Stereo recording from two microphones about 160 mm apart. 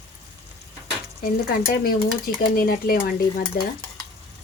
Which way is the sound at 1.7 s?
65° left (ahead or behind).